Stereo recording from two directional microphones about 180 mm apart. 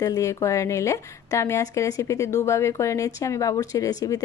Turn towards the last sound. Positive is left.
turn(degrees=20)  # may be behind; listen again after turning